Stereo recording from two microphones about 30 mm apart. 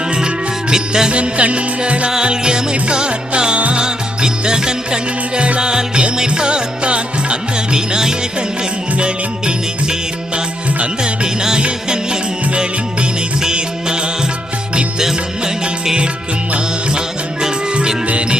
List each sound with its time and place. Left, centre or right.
0.1 s music: right
1.1 s music: right
2.2 s music: right
9.0 s music: right
11.0 s music: right
13.4 s music: right
18.1 s music: right